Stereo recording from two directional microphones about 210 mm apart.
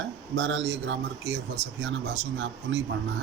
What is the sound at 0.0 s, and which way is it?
A man's voice, 60° right (ahead or behind).